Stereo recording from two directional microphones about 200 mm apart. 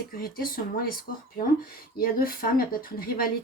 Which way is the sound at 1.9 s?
45° left (ahead or behind).